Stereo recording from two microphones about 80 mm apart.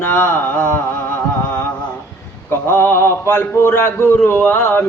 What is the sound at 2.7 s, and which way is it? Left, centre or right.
A man's voice, left.